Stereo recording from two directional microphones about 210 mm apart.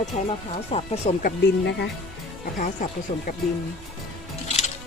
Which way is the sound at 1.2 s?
55° left (ahead or behind).